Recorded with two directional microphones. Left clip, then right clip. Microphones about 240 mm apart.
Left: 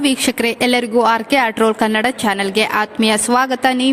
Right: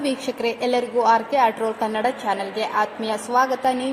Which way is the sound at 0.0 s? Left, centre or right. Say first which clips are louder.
Left 7 dB; left.